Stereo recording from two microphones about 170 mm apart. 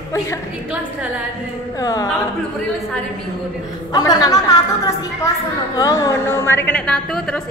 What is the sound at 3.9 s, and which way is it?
A woman's voice, 20° left (ahead or behind).